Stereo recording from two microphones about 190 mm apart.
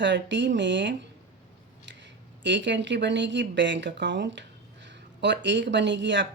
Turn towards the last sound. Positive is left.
turn(degrees=-70)  # may be behind; listen again after turning